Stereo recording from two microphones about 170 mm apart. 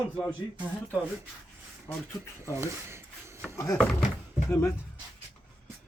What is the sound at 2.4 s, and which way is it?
Speech, 15° right (ahead or behind).